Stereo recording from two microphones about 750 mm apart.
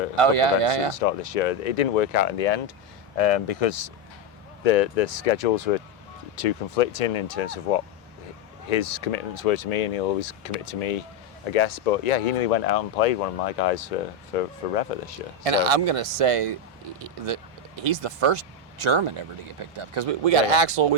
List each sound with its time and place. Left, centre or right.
0.2 s speech: right
0.9 s speech: left
15.4 s speech: right
17.8 s speech: right